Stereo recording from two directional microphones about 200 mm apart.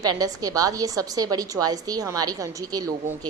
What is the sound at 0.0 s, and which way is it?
A woman's voice, 20° right (ahead or behind).